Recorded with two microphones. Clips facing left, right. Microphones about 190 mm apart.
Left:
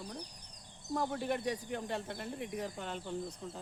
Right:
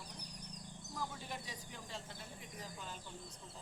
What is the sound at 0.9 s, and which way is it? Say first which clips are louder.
Speech: left 11 dB; 65° left (ahead or behind).